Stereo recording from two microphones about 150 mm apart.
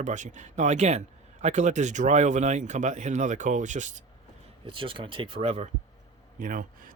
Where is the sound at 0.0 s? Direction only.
55° right (ahead or behind).